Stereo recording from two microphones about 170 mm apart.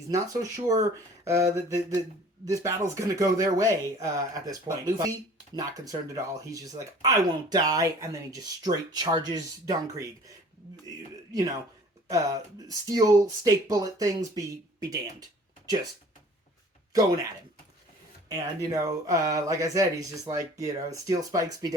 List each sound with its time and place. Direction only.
0.1 s speech: 20° right (ahead or behind)
12.0 s speech: 20° right (ahead or behind)
18.3 s speech: 20° right (ahead or behind)